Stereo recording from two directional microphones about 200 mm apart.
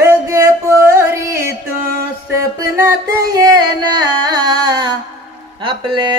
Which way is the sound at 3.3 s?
20° right (ahead or behind).